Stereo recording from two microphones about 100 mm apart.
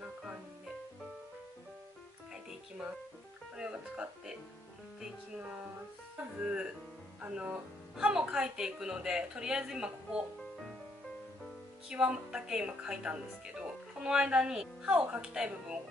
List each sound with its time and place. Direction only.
3.5 s music: 10° right (ahead or behind)
6.4 s speech: 10° right (ahead or behind)
11.9 s speech: 10° right (ahead or behind)